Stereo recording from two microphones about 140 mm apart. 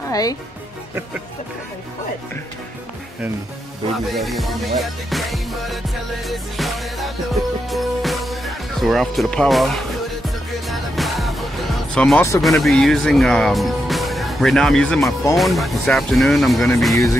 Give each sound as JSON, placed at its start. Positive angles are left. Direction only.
{"t": 0.1, "sound": "speech", "side_deg": 25}
{"t": 4.1, "sound": "music", "side_deg": 0}
{"t": 12.4, "sound": "speech", "side_deg": 0}
{"t": 15.3, "sound": "music", "side_deg": 0}
{"t": 16.9, "sound": "speech", "side_deg": 20}